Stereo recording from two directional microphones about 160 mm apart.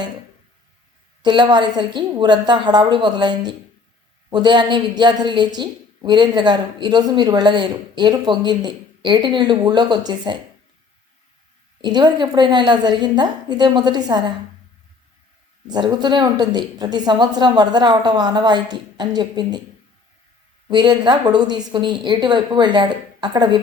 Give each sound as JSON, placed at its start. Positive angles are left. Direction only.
{"t": 1.2, "sound": "a woman's voice", "side_deg": -30}
{"t": 11.8, "sound": "a woman's voice", "side_deg": -25}
{"t": 15.6, "sound": "a woman's voice", "side_deg": -25}
{"t": 20.7, "sound": "a woman's voice", "side_deg": -25}